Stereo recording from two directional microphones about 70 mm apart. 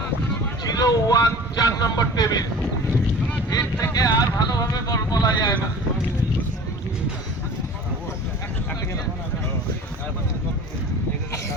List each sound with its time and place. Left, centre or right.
0.6 s speech: left
3.5 s speech: left